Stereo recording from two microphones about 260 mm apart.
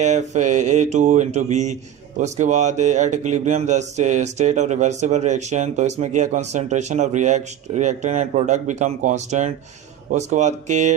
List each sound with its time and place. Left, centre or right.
0.0 s mantra: right